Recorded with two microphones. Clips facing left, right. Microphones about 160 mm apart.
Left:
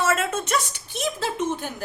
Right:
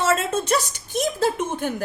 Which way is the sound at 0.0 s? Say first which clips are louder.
Right 2 dB; 25° right (ahead or behind).